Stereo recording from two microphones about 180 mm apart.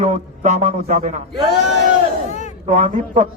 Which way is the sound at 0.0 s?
40° right (ahead or behind).